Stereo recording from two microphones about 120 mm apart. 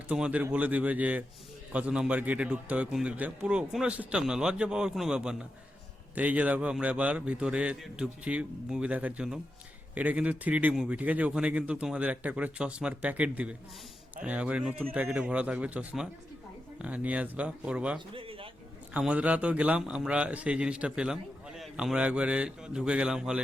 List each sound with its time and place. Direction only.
0.1 s a man's voice: 10° right (ahead or behind)
18.1 s a sound: 50° right (ahead or behind)
18.9 s a man's voice: 10° right (ahead or behind)